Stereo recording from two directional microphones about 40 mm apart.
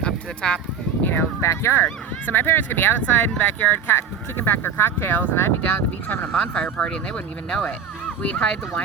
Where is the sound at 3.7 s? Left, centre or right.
Left.